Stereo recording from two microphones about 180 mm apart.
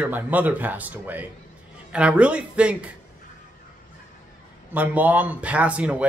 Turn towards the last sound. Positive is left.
turn(degrees=-5)  # may be behind; listen again after turning